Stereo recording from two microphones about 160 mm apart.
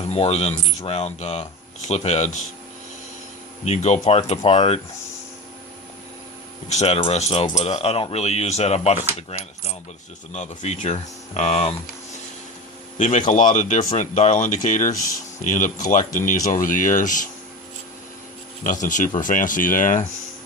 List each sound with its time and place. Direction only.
0.1 s speech: 40° left (ahead or behind)
3.6 s speech: 45° left (ahead or behind)
6.7 s speech: 40° left (ahead or behind)
10.3 s speech: 45° left (ahead or behind)
13.0 s speech: 50° left (ahead or behind)
18.6 s speech: 55° left (ahead or behind)